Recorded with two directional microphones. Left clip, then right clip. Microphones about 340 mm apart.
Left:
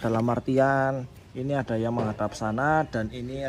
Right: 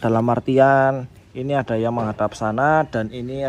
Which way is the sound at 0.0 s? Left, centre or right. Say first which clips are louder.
Right 7 dB; centre.